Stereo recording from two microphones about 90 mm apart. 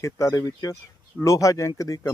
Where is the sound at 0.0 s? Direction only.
35° left (ahead or behind).